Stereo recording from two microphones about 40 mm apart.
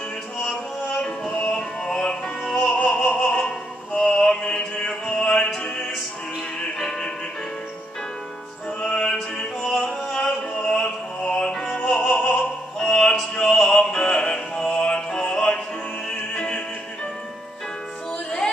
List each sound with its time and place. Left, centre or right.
0.8 s music: left
2.5 s opera: left
4.3 s music: centre
5.1 s music: left
6.8 s music: centre
8.8 s music: left
12.2 s opera: left
14.8 s music: left